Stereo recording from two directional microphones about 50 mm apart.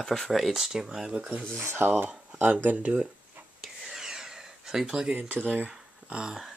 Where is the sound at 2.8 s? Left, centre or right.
Right.